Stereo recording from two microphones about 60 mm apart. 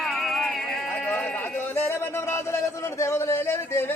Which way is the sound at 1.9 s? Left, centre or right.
Left.